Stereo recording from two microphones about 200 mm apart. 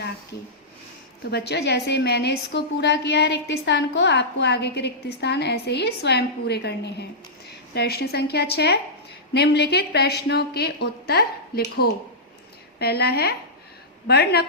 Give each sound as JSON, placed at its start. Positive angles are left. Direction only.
{"t": 1.3, "sound": "a woman's voice", "side_deg": 55}